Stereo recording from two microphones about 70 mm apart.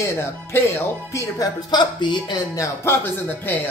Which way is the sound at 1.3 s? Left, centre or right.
Left.